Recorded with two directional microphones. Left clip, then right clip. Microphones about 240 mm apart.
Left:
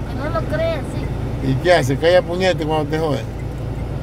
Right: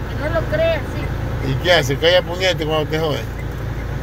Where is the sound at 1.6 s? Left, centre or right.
Left.